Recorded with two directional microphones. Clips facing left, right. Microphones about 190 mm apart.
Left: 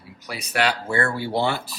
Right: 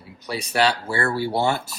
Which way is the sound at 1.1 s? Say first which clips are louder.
Right 2 dB; 45° right (ahead or behind).